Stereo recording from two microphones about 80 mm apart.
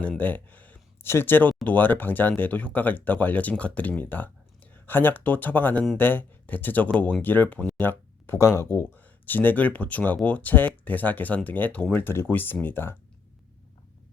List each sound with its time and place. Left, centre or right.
0.2 s speech: left
9.0 s speech: left